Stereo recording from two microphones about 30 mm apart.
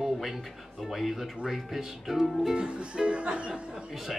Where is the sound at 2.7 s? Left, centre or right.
Right.